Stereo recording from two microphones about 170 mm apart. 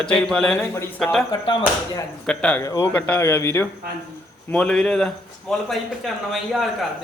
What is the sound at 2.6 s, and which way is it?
A man's voice, 20° left (ahead or behind).